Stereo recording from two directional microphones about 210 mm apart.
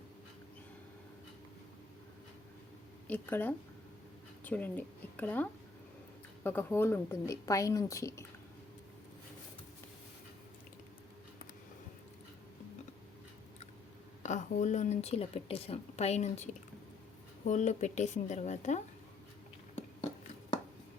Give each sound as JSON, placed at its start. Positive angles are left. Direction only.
{"t": 3.1, "sound": "a woman's voice", "side_deg": 10}
{"t": 14.2, "sound": "a woman's voice", "side_deg": 35}